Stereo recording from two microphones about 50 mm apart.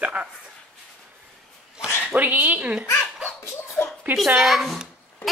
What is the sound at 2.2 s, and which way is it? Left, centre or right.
Speech, right.